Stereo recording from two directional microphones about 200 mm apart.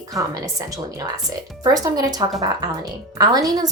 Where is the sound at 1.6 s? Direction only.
20° right (ahead or behind).